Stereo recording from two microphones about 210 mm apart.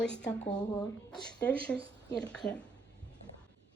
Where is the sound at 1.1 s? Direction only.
5° left (ahead or behind).